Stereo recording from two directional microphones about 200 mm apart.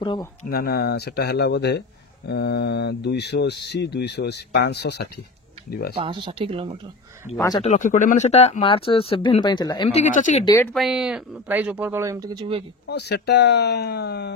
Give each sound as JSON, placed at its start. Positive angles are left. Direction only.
{"t": 0.0, "sound": "speech", "side_deg": 20}
{"t": 0.5, "sound": "speech", "side_deg": 50}
{"t": 5.9, "sound": "speech", "side_deg": -25}
{"t": 7.3, "sound": "speech", "side_deg": 20}
{"t": 7.6, "sound": "speech", "side_deg": 35}
{"t": 10.4, "sound": "speech", "side_deg": 15}
{"t": 10.7, "sound": "speech", "side_deg": 0}
{"t": 12.8, "sound": "speech", "side_deg": 55}